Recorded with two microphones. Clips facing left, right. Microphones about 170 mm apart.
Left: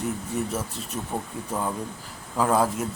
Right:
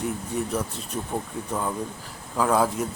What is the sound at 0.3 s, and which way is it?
Speech, 5° left (ahead or behind).